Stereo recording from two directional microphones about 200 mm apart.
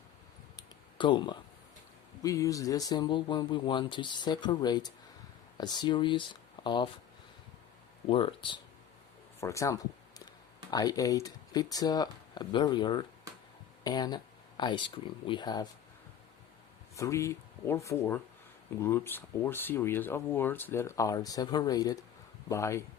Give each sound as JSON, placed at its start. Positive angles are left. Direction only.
{"t": 0.5, "sound": "a sound", "side_deg": 25}
{"t": 2.2, "sound": "speech", "side_deg": 15}
{"t": 8.0, "sound": "speech", "side_deg": 25}
{"t": 16.9, "sound": "speech", "side_deg": 15}